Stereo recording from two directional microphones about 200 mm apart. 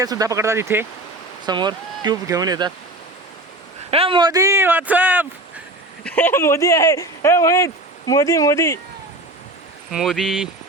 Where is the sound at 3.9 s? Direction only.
30° right (ahead or behind); by 5.2 s 10° right (ahead or behind).